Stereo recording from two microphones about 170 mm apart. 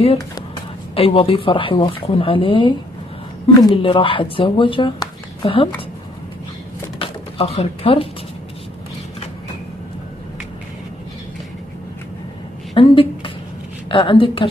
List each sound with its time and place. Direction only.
0.9 s speech: 35° left (ahead or behind)
7.0 s speech: 35° left (ahead or behind)
12.7 s a sound: 30° left (ahead or behind)
13.8 s a woman's voice: 30° left (ahead or behind)